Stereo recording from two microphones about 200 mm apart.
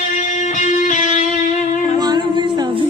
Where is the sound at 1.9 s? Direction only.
20° right (ahead or behind).